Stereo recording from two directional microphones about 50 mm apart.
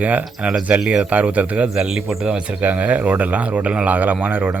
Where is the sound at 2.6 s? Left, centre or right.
Right.